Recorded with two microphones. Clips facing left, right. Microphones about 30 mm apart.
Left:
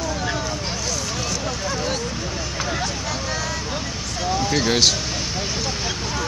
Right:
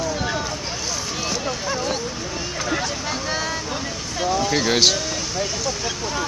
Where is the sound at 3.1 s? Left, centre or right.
Right.